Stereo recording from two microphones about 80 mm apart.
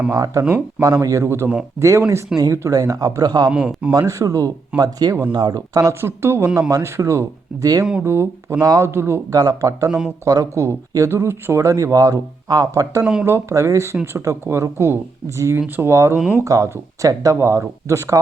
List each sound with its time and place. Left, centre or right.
0.1 s a man's voice: right
3.5 s a man's voice: centre
3.9 s a man's voice: right
4.8 s a man's voice: right
5.9 s speech: right
6.6 s a man's voice: right
6.8 s speech: right
8.0 s speech: right
8.6 s a man's voice: right
8.9 s speech: right
9.3 s a man's voice: right
11.7 s a man's voice: right; by 16.4 s centre
16.4 s speech: right